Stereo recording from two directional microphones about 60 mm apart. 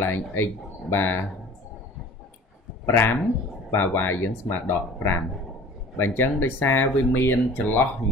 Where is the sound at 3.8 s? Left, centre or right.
Left.